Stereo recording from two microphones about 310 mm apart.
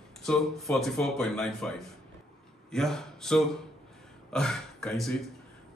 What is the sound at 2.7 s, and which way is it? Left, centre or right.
A man's voice, centre.